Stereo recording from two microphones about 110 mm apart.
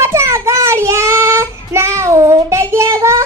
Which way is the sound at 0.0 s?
25° right (ahead or behind).